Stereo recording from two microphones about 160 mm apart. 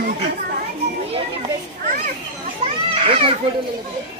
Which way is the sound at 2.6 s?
35° right (ahead or behind).